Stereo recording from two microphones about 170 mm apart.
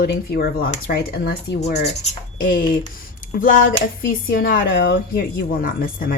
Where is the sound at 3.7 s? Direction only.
65° left (ahead or behind).